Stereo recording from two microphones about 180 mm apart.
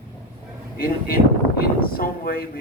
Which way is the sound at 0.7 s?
55° left (ahead or behind).